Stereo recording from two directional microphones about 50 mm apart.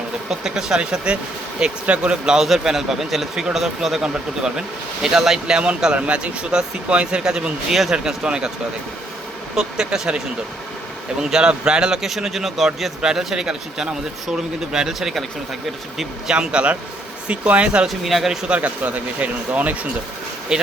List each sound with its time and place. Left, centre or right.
0.3 s speech: centre
5.0 s speech: centre
5.5 s speech: right
9.6 s speech: centre
11.2 s speech: centre
13.0 s speech: centre
16.3 s speech: centre
17.8 s speech: centre
18.4 s speech: right
20.5 s speech: centre